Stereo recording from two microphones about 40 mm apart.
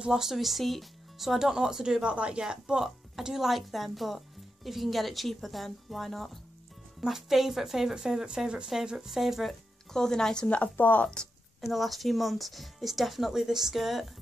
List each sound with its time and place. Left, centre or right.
0.1 s a woman's voice: centre
2.0 s a woman's voice: right; by 6.4 s centre
7.0 s speech: centre
9.9 s speech: centre
10.5 s speech: left
11.6 s a woman's voice: centre